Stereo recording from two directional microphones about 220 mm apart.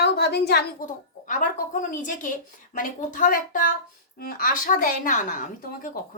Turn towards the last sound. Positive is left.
turn(degrees=35)  # may be behind; listen again after turning